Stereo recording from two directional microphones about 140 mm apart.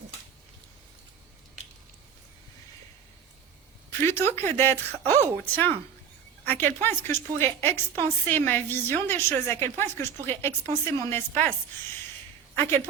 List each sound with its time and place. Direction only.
4.0 s a woman's voice: 15° left (ahead or behind)